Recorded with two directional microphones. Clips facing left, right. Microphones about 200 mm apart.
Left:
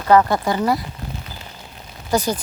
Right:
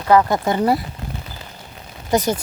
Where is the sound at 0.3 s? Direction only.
20° right (ahead or behind).